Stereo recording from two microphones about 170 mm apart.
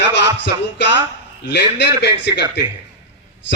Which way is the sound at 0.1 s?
90° left.